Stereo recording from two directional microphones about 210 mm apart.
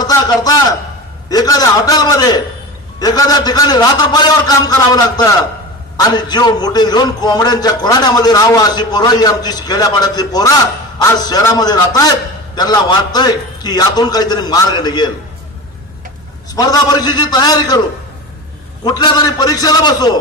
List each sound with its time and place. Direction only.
0.0 s a man's voice: 20° left (ahead or behind)
16.5 s a man's voice: 15° left (ahead or behind)
18.9 s a man's voice: 20° left (ahead or behind)